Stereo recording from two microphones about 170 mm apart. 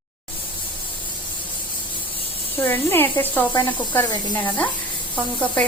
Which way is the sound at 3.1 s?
10° left (ahead or behind).